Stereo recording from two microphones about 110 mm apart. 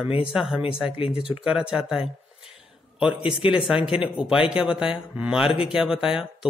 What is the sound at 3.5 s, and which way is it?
Speech, 5° right (ahead or behind).